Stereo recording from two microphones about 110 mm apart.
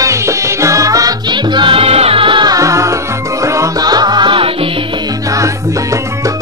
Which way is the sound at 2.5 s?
30° right (ahead or behind).